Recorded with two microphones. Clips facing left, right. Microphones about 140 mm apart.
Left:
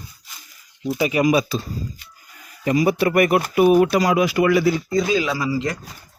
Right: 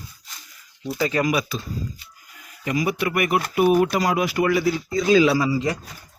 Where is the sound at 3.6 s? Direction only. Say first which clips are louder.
Left 3 dB; 90° left.